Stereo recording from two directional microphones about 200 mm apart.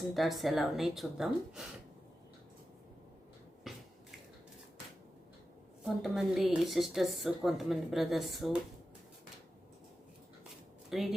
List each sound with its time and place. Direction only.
0.1 s a woman's voice: centre (ahead or behind)
3.7 s finger snapping: centre (ahead or behind)
5.8 s a woman's voice: centre (ahead or behind)
10.8 s speech: centre (ahead or behind)